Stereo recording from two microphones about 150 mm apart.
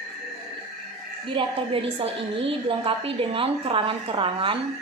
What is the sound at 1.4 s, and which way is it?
A woman's voice, 35° right (ahead or behind).